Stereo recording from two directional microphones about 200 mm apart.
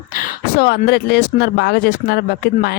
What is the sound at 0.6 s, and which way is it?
Speech, 55° left (ahead or behind).